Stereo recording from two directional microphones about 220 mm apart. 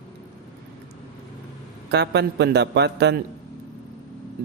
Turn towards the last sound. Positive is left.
turn(degrees=-50)  # may be behind; listen again after turning